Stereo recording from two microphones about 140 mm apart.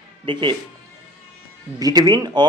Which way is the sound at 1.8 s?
25° right (ahead or behind).